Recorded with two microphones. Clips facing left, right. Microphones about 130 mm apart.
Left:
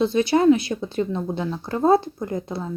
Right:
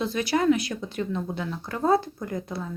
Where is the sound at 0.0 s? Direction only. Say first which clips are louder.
Left 6 dB; 25° left (ahead or behind).